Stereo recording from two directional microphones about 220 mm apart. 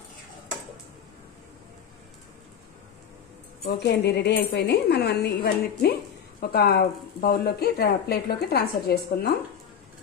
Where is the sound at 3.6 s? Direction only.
50° left (ahead or behind).